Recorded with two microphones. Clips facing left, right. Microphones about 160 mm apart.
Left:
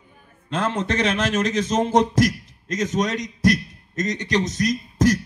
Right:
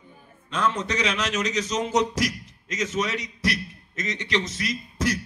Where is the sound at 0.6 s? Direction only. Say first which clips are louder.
Left 3 dB; 55° left (ahead or behind).